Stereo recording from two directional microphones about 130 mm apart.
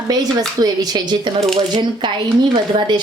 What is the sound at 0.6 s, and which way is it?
Speech, 30° right (ahead or behind).